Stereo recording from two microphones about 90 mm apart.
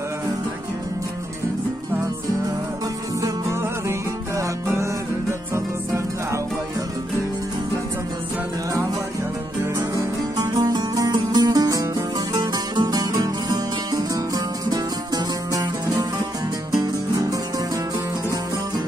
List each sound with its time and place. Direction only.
4.4 s music: 30° right (ahead or behind)
9.8 s music: 45° right (ahead or behind)